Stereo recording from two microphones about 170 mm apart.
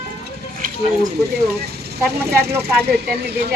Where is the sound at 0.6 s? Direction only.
50° right (ahead or behind).